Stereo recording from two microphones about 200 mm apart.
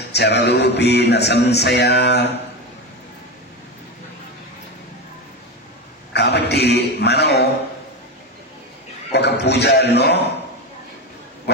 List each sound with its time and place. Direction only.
0.1 s music: 55° left (ahead or behind)
6.1 s a man's voice: 55° left (ahead or behind)
9.1 s music: 55° left (ahead or behind)